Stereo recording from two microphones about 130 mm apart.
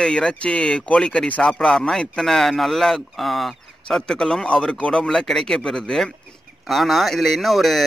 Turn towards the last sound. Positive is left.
turn(degrees=0)  # may be behind; listen again after turning